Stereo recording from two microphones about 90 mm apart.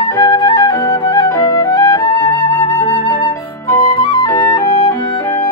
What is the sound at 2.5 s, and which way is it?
Flute, 25° left (ahead or behind).